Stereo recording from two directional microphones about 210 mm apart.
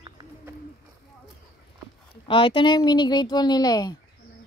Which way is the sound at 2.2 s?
25° left (ahead or behind).